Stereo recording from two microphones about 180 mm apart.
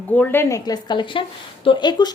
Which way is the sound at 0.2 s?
10° left (ahead or behind).